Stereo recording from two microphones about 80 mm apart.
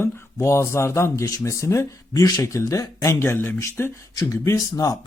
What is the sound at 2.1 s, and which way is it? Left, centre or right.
Speech, left.